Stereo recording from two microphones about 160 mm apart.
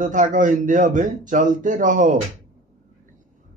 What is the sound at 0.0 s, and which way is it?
A man's voice, 55° right (ahead or behind).